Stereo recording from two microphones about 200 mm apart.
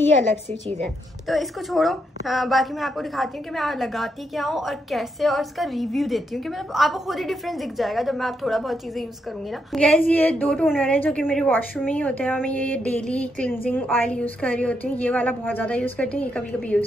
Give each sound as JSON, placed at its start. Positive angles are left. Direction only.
{"t": 0.5, "sound": "a woman's voice", "side_deg": -35}
{"t": 0.8, "sound": "a woman's voice", "side_deg": 0}